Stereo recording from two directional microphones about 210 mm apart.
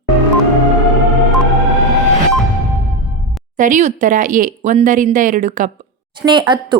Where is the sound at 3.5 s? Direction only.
40° right (ahead or behind).